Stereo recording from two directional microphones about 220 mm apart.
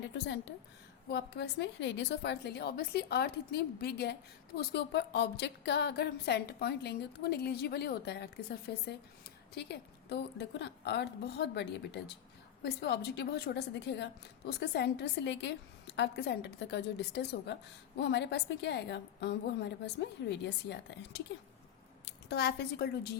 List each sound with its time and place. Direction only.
1.0 s a woman's voice: 50° left (ahead or behind)